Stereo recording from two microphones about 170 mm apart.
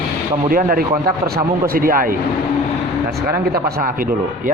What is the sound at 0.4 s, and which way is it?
A man's voice, 55° right (ahead or behind).